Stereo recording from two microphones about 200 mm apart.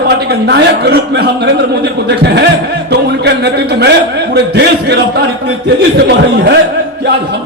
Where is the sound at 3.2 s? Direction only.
55° right (ahead or behind).